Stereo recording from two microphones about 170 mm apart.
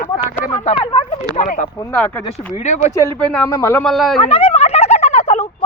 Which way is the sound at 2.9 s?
10° left (ahead or behind).